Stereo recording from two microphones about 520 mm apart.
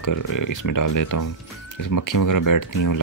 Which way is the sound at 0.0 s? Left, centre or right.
Left.